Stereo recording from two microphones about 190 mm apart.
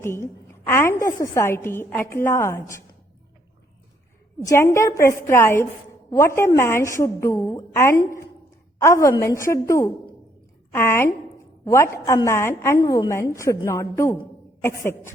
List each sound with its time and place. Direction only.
0.0 s a woman's voice: 15° left (ahead or behind)
4.4 s a woman's voice: 15° left (ahead or behind)